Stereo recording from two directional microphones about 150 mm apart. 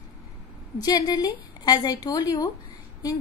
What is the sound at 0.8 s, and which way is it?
A woman's voice, 25° left (ahead or behind).